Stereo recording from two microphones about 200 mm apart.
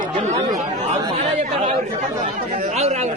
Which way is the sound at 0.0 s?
35° right (ahead or behind).